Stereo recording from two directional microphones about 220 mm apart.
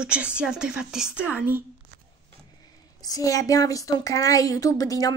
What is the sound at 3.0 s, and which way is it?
A woman's voice, 15° left (ahead or behind).